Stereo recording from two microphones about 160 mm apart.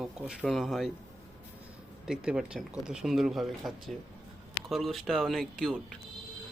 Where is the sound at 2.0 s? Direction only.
5° right (ahead or behind).